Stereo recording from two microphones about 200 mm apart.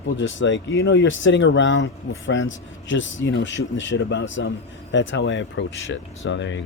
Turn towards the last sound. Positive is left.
turn(degrees=65)  # may be behind; listen again after turning